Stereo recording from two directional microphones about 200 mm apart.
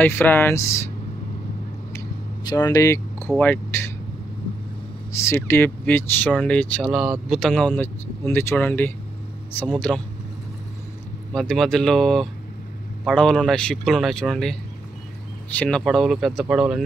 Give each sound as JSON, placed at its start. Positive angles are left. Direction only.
{"t": 0.0, "sound": "speech", "side_deg": 10}
{"t": 1.9, "sound": "a sound", "side_deg": 15}
{"t": 3.3, "sound": "speech", "side_deg": 10}
{"t": 5.1, "sound": "speech", "side_deg": 10}
{"t": 11.3, "sound": "speech", "side_deg": 0}